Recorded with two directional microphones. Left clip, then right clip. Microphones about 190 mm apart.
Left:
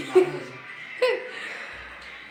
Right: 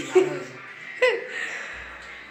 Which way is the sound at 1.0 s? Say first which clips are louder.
Right 2 dB; 5° left (ahead or behind).